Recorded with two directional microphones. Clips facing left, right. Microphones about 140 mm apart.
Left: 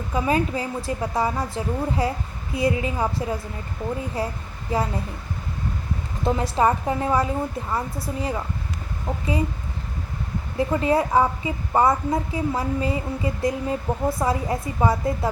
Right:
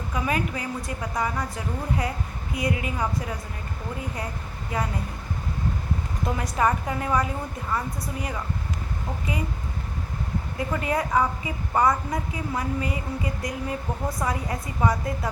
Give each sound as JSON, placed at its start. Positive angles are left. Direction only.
{"t": 0.1, "sound": "a woman's voice", "side_deg": 30}
{"t": 4.7, "sound": "a woman's voice", "side_deg": 30}
{"t": 6.2, "sound": "a woman's voice", "side_deg": 25}
{"t": 10.6, "sound": "a woman's voice", "side_deg": 30}